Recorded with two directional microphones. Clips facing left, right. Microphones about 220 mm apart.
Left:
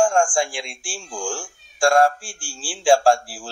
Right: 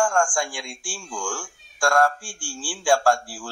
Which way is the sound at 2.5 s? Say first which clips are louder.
Left 4 dB; 30° left (ahead or behind).